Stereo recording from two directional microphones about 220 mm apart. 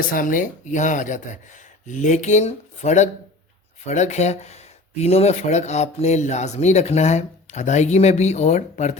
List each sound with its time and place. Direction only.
0.0 s speech: 40° left (ahead or behind)